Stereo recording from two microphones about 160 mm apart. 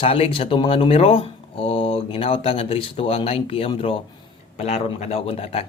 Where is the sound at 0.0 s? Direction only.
35° left (ahead or behind).